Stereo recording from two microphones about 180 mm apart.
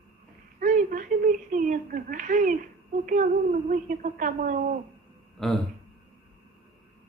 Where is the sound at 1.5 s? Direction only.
45° right (ahead or behind).